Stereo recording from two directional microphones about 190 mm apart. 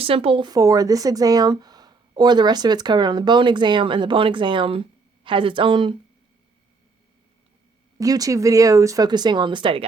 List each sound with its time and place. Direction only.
0.0 s speech: 30° right (ahead or behind)
7.9 s speech: 20° right (ahead or behind)